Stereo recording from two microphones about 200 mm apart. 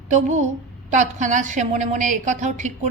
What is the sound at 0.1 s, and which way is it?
A woman's voice, 40° right (ahead or behind).